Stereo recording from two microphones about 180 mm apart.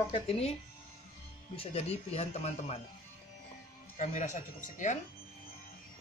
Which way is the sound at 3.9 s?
40° left (ahead or behind).